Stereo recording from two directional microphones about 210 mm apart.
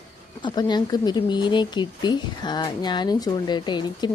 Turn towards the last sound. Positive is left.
turn(degrees=20)  # may be behind; listen again after turning